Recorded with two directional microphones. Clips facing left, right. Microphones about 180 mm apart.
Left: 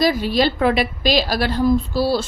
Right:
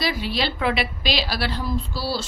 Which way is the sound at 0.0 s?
45° left (ahead or behind).